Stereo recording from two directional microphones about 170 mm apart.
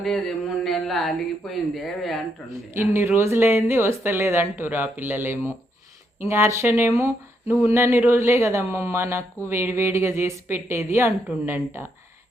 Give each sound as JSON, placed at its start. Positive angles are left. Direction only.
{"t": 0.0, "sound": "speech", "side_deg": 0}
{"t": 2.7, "sound": "speech", "side_deg": -15}